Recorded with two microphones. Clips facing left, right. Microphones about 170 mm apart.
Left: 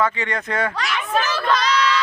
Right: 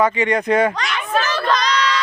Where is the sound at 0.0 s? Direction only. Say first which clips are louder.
Right 5 dB; 15° right (ahead or behind).